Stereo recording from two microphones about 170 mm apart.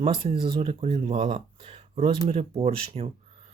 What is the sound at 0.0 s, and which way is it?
Speech, 35° right (ahead or behind).